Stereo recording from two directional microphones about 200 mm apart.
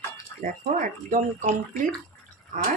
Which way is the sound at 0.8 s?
40° right (ahead or behind).